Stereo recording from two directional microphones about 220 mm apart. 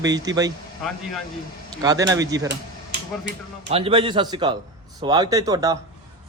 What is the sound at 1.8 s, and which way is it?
Speech, 15° right (ahead or behind).